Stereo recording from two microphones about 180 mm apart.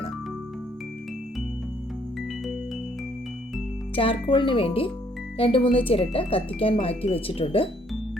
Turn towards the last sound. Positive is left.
turn(degrees=30)  # may be behind; listen again after turning